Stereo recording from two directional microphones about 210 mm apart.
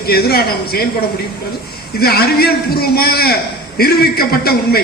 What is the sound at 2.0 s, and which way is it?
A man's voice, 45° left (ahead or behind).